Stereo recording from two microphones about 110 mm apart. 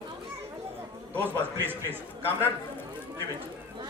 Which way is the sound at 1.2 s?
20° right (ahead or behind).